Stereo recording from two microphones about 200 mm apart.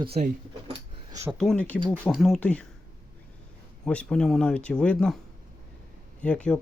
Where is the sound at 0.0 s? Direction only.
30° right (ahead or behind).